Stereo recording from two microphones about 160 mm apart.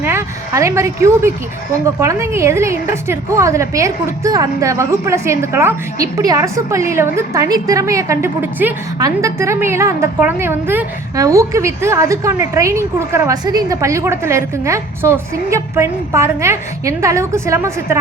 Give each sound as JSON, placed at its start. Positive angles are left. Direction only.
{"t": 0.0, "sound": "a woman's voice", "side_deg": -15}